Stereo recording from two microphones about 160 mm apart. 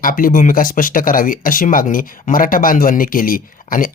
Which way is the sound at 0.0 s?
60° left (ahead or behind).